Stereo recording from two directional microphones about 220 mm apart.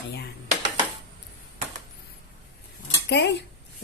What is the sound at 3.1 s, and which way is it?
Speech, 50° left (ahead or behind).